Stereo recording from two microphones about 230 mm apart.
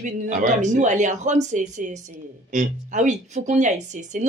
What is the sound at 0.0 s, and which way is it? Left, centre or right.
Speech, right.